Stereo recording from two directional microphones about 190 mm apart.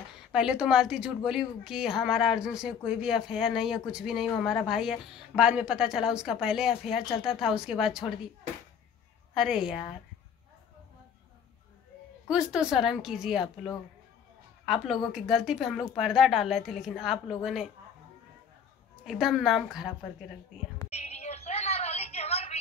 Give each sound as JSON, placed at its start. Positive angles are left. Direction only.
{"t": 0.3, "sound": "a woman's voice", "side_deg": -5}
{"t": 9.3, "sound": "a woman's voice", "side_deg": 0}
{"t": 12.3, "sound": "a woman's voice", "side_deg": -5}
{"t": 14.7, "sound": "a woman's voice", "side_deg": 0}
{"t": 19.0, "sound": "a woman's voice", "side_deg": 0}
{"t": 20.9, "sound": "a sound", "side_deg": 35}